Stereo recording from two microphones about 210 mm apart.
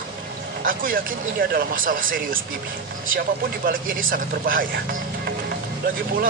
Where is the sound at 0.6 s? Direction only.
40° right (ahead or behind).